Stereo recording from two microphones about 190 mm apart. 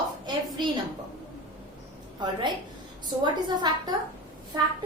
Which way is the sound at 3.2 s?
20° right (ahead or behind).